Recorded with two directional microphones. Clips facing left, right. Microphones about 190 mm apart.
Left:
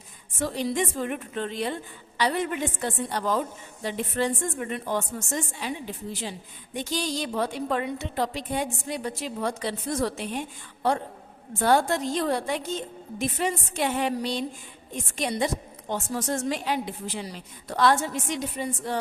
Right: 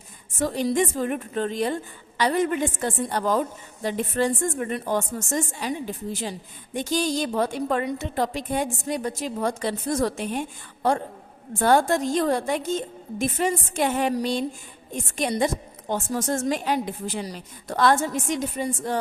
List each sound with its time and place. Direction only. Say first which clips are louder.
0.3 s a woman's voice: right 4 dB; 45° right (ahead or behind)
11.6 s a woman's voice: right 3 dB; 50° right (ahead or behind)